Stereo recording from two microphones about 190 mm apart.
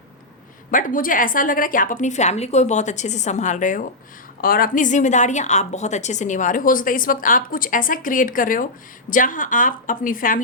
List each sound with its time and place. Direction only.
0.7 s a woman's voice: 45° left (ahead or behind)